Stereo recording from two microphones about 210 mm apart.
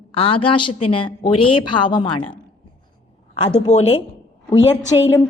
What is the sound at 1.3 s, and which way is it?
Speech, 90° left.